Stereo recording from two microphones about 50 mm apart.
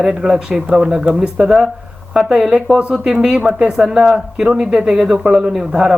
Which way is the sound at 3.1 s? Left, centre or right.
Centre.